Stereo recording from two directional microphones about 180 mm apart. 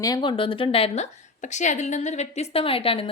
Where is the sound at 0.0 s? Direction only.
25° left (ahead or behind).